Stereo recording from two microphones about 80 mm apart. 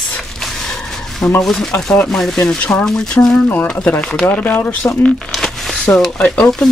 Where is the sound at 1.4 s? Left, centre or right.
Centre.